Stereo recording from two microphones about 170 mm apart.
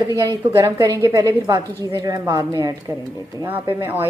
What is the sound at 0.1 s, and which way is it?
Speech, 25° right (ahead or behind).